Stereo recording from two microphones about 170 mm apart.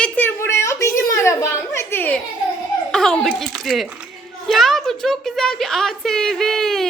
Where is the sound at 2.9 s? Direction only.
5° left (ahead or behind).